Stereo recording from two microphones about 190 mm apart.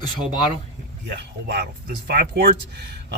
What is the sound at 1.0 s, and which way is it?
Speech, 65° right (ahead or behind).